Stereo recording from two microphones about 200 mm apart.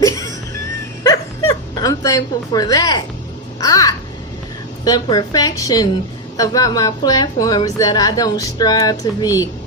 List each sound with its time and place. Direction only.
1.0 s dog: 20° left (ahead or behind)
3.6 s speech: 20° left (ahead or behind)